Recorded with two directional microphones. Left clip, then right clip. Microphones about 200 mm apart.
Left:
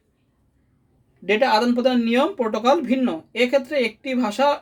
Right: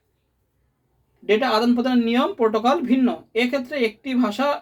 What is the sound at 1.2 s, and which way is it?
Speech, 50° left (ahead or behind).